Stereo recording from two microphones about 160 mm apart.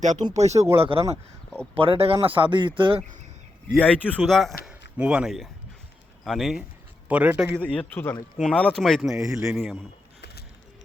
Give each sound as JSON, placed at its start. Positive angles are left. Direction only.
{"t": 0.0, "sound": "speech", "side_deg": -45}
{"t": 3.8, "sound": "a man's voice", "side_deg": 10}
{"t": 7.6, "sound": "a man's voice", "side_deg": 5}
{"t": 10.2, "sound": "a sound", "side_deg": 90}